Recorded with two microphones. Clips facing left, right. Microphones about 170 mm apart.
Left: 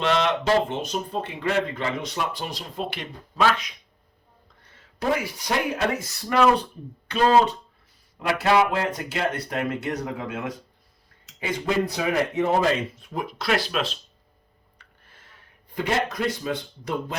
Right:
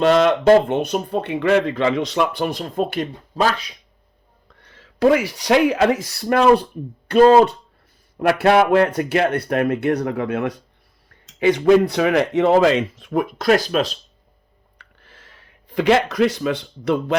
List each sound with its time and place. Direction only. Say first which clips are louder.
0.0 s speech: right 8 dB; 45° right (ahead or behind)
4.6 s speech: right 11 dB; 90° right
7.1 s speech: right 8 dB; 45° right (ahead or behind)
8.3 s speech: right 6 dB; 60° right (ahead or behind); by 13.2 s 85° right
13.2 s speech: right 7 dB; 45° right (ahead or behind)
14.8 s a sound: right 6 dB; 90° right; by 17.2 s 70° right (ahead or behind)